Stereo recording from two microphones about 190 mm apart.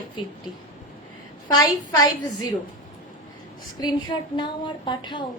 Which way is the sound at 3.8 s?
25° left (ahead or behind).